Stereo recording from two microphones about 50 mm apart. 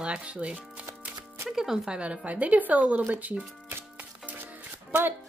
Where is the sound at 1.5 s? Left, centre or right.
Centre; by 3.4 s right.